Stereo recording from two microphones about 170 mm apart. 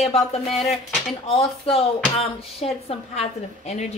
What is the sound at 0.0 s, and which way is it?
Speech, 35° left (ahead or behind).